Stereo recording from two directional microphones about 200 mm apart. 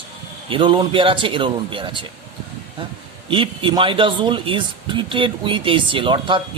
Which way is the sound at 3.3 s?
25° right (ahead or behind).